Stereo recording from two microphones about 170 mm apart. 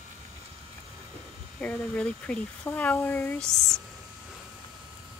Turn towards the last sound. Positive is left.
turn(degrees=10)  # may be behind; listen again after turning